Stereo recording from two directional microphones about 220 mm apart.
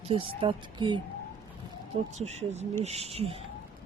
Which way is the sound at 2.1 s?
30° right (ahead or behind).